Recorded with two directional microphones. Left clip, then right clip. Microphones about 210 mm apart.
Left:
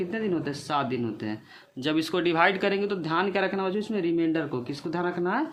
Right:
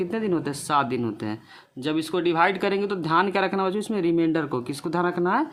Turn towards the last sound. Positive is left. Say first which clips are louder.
# right 5 dB
turn(degrees=-30)  # may be behind; listen again after turning